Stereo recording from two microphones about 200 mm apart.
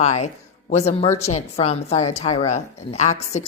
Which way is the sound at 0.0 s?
35° left (ahead or behind).